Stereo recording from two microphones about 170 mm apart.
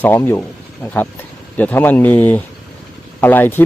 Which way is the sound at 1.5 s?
10° left (ahead or behind).